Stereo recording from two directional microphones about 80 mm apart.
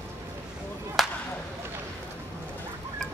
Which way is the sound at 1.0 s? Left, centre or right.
Centre.